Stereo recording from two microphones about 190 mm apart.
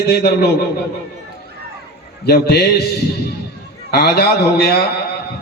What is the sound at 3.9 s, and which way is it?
Speech, 55° left (ahead or behind).